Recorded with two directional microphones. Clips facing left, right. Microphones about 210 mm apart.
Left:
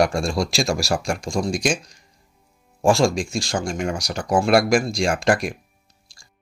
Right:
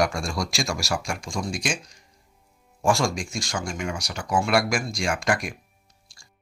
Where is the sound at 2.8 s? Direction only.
30° left (ahead or behind).